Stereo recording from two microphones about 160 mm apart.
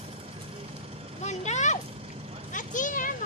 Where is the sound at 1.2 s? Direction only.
45° left (ahead or behind).